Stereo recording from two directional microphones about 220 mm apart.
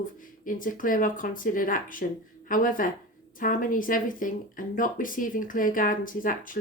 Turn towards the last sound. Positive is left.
turn(degrees=40)  # may be behind; listen again after turning